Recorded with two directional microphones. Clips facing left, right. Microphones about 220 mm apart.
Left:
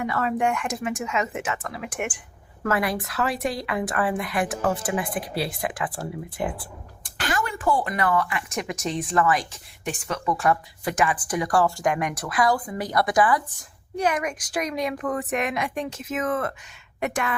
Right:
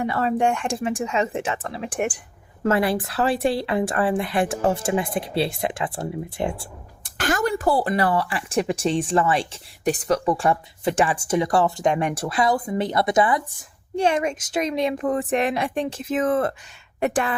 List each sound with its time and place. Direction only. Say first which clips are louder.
0.0 s speech: right 3 dB; 30° right (ahead or behind)
7.0 s speech: right 5 dB; 45° right (ahead or behind)